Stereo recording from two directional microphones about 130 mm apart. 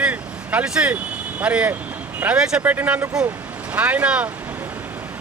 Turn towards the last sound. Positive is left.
turn(degrees=-10)  # may be behind; listen again after turning